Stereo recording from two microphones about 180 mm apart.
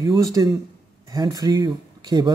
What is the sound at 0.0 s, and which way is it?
Speech, 20° right (ahead or behind).